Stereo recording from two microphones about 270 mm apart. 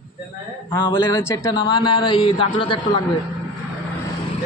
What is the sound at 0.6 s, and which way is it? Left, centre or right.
A man's voice, centre.